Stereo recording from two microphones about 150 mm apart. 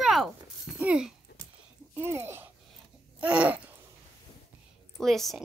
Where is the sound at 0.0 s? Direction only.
Centre (ahead or behind).